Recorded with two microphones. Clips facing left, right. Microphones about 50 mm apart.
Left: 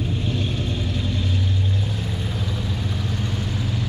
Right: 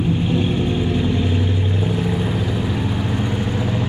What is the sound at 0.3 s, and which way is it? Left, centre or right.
Vehicle, right.